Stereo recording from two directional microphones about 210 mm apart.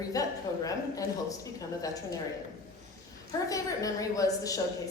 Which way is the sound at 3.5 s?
15° left (ahead or behind).